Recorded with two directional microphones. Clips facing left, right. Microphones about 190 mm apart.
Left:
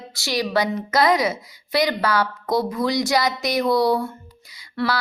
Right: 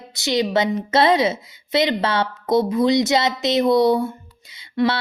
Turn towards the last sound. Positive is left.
turn(degrees=-20)  # may be behind; listen again after turning